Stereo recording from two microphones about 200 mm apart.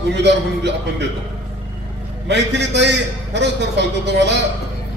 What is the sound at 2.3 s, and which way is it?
A man's voice, 60° right (ahead or behind).